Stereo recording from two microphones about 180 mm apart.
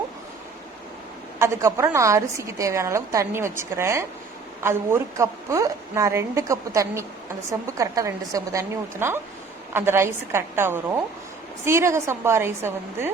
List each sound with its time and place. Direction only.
1.4 s a woman's voice: 15° right (ahead or behind)